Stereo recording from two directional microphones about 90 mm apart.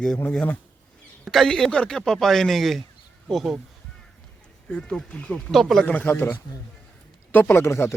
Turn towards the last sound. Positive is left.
turn(degrees=30)  # may be behind; listen again after turning